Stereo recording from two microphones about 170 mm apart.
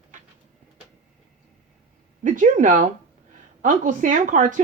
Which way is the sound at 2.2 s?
50° right (ahead or behind).